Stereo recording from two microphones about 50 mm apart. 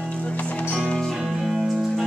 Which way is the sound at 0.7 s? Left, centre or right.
Centre.